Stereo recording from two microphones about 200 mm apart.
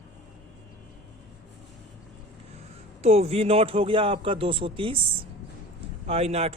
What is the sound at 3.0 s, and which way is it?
A man's voice, 30° right (ahead or behind).